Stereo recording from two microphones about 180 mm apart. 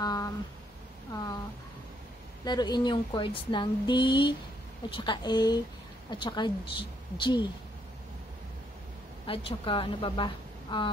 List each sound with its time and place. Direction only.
0.0 s a sound: 20° left (ahead or behind)
2.4 s speech: 25° left (ahead or behind)
9.2 s speech: 30° left (ahead or behind)